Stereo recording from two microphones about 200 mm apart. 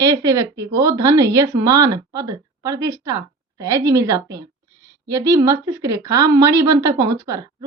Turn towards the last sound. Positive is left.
turn(degrees=-15)  # may be behind; listen again after turning